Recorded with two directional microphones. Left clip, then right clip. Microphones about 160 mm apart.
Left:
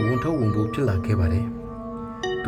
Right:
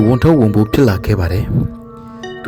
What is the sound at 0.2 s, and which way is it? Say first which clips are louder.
Speech: right 12 dB; 40° right (ahead or behind).